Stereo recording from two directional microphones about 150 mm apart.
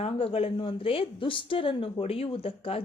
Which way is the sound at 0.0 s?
40° left (ahead or behind).